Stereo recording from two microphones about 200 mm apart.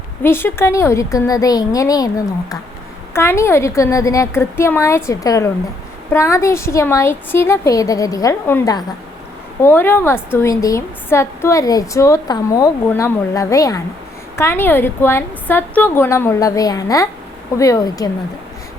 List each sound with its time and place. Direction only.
0.2 s a woman's voice: 10° left (ahead or behind)